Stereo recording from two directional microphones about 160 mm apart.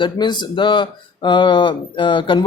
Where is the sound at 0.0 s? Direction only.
30° left (ahead or behind).